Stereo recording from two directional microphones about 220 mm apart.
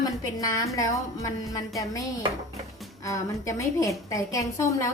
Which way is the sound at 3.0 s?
15° left (ahead or behind).